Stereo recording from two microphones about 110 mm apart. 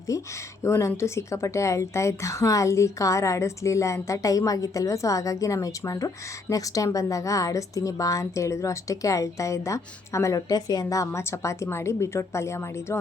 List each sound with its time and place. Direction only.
0.1 s a woman's voice: 30° left (ahead or behind)